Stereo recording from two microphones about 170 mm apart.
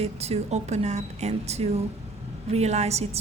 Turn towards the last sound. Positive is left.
turn(degrees=-40)  # may be behind; listen again after turning